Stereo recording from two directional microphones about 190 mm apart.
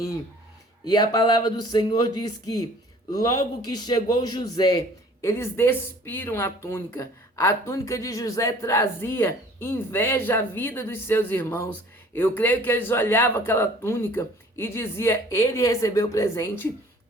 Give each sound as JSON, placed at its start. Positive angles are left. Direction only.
{"t": 0.9, "sound": "speech", "side_deg": 20}